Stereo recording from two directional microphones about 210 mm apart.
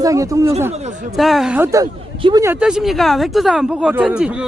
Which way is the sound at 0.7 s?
30° right (ahead or behind).